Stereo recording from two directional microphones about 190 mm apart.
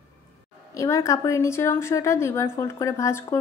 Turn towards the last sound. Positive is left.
turn(degrees=15)  # may be behind; listen again after turning